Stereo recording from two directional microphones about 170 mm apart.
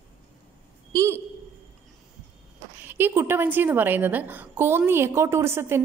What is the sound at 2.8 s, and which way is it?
A woman's voice, 10° right (ahead or behind).